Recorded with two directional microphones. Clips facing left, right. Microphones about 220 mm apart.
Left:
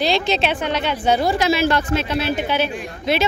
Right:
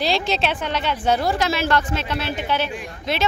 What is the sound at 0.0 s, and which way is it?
Speech, 5° right (ahead or behind).